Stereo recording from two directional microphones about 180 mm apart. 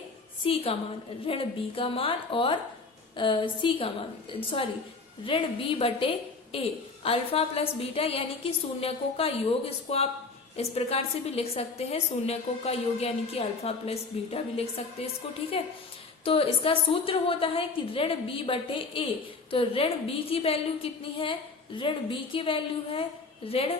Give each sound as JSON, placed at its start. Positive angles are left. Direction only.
{"t": 0.4, "sound": "a woman's voice", "side_deg": 30}